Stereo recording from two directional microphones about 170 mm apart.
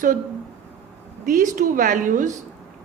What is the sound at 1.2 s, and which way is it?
A woman's voice, 50° right (ahead or behind).